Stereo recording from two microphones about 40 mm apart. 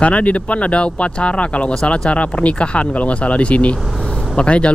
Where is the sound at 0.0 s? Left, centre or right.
Left.